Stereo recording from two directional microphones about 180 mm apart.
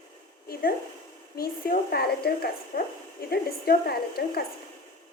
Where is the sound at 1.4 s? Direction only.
55° left (ahead or behind).